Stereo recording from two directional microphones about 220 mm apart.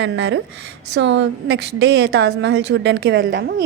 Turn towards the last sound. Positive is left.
turn(degrees=-45)  # may be behind; listen again after turning